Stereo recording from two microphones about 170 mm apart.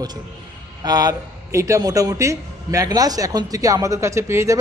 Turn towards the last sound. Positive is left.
turn(degrees=-15)  # may be behind; listen again after turning